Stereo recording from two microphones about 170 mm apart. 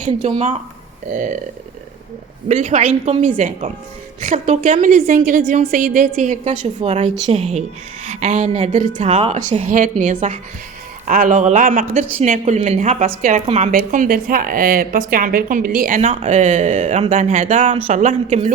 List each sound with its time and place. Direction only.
0.0 s speech: 40° right (ahead or behind)
2.5 s a woman's voice: 45° right (ahead or behind)
16.0 s speech: 40° right (ahead or behind)